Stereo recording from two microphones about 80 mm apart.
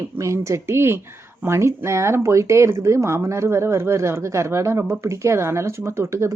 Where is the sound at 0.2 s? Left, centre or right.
Right.